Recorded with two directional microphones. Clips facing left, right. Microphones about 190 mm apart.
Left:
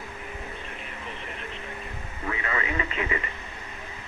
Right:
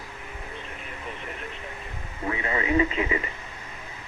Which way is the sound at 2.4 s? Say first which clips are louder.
Right 8 dB; 25° right (ahead or behind).